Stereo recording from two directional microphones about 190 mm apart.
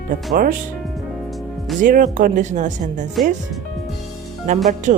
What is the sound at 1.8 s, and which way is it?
Speech, 45° right (ahead or behind).